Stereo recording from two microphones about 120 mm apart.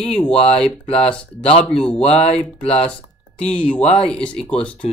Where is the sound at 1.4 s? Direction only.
55° left (ahead or behind).